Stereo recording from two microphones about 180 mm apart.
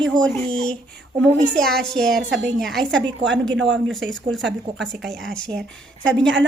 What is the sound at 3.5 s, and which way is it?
Speech, 90° right.